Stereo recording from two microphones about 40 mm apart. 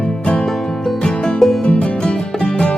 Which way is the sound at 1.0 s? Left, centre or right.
Centre.